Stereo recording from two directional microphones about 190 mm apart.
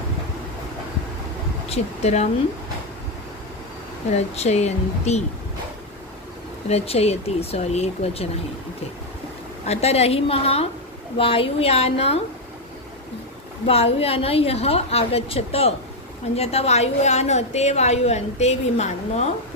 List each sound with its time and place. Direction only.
1.7 s a woman's voice: 35° left (ahead or behind)
4.4 s a woman's voice: 35° left (ahead or behind)
6.7 s a woman's voice: 35° left (ahead or behind)
9.7 s a woman's voice: 35° left (ahead or behind)
13.7 s a woman's voice: 30° left (ahead or behind)